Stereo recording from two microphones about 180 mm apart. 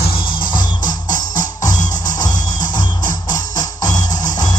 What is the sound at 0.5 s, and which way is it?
Music, 25° left (ahead or behind).